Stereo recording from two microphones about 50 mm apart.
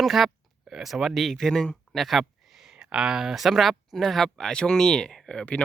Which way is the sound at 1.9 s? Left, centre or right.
Centre.